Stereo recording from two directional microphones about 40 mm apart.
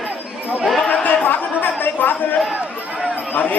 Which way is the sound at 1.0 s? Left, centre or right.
Left.